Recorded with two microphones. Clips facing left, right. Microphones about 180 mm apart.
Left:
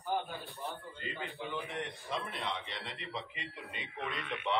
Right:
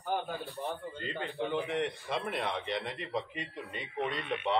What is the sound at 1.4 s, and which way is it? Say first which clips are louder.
A man's voice: right 8 dB; 60° right (ahead or behind).